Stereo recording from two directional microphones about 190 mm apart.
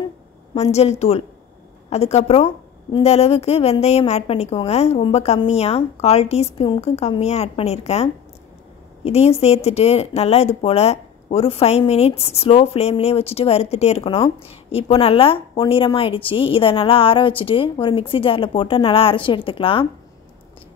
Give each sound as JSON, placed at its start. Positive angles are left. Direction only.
{"t": 0.6, "sound": "a woman's voice", "side_deg": 35}